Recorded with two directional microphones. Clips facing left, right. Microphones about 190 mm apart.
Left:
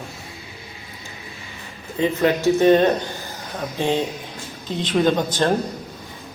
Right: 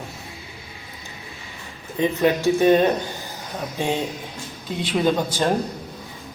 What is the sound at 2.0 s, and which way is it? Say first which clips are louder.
A man's voice: even; 15° right (ahead or behind).